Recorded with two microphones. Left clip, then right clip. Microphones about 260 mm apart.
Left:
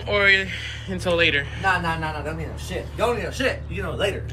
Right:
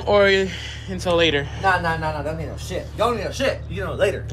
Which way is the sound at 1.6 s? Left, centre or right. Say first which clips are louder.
Right 2 dB; right.